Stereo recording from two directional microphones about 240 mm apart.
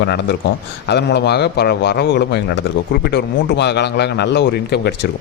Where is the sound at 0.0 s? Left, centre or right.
Left.